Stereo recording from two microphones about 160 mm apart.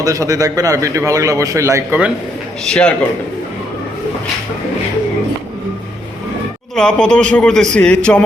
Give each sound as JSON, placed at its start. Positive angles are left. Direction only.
{"t": 0.0, "sound": "a man's voice", "side_deg": -20}
{"t": 2.6, "sound": "a man's voice", "side_deg": 5}
{"t": 6.7, "sound": "a man's voice", "side_deg": 5}